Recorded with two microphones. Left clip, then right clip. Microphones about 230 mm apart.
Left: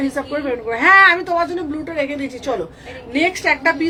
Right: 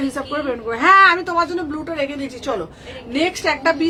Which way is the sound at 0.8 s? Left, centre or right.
Centre.